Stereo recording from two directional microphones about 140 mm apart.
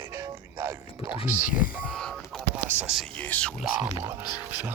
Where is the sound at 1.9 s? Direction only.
Centre (ahead or behind).